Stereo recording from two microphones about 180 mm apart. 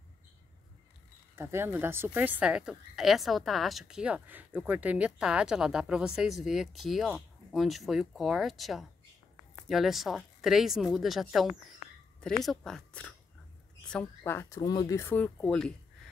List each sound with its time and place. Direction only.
1.3 s a woman's voice: 15° right (ahead or behind); by 15.7 s 5° left (ahead or behind)